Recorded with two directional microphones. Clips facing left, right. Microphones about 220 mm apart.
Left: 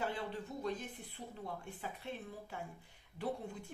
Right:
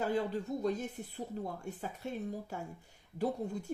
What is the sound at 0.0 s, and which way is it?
Speech, 40° right (ahead or behind).